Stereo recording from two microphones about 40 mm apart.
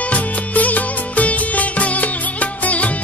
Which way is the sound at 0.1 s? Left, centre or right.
Left.